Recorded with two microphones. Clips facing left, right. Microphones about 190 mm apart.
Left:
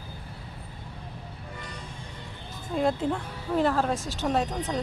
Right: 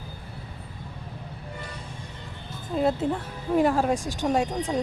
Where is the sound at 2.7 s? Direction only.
5° right (ahead or behind).